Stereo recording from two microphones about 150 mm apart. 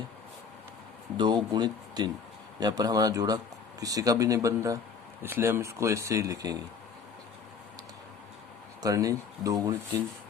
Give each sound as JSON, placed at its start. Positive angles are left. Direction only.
{"t": 1.1, "sound": "speech", "side_deg": -30}
{"t": 8.8, "sound": "speech", "side_deg": -20}